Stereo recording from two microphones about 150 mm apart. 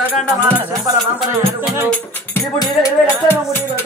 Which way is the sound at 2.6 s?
20° left (ahead or behind).